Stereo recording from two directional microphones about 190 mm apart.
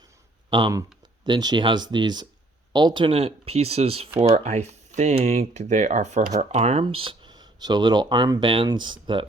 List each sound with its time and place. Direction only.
0.5 s speech: 20° right (ahead or behind)